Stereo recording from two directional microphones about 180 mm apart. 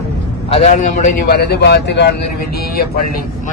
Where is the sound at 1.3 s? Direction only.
65° left (ahead or behind).